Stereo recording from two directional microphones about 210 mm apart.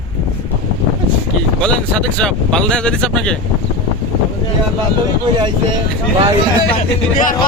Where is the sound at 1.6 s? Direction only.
5° left (ahead or behind).